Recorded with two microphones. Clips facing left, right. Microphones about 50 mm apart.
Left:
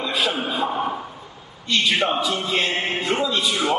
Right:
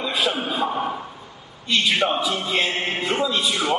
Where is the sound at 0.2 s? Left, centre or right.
Centre.